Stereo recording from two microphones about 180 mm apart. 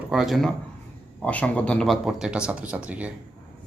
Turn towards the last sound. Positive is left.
turn(degrees=-5)  # may be behind; listen again after turning